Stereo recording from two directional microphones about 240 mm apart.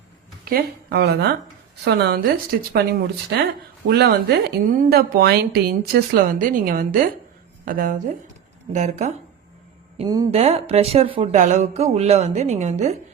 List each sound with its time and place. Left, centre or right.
0.4 s a woman's voice: right
3.8 s a woman's voice: right
10.0 s speech: centre